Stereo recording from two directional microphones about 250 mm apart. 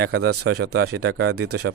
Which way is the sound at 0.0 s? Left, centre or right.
Right.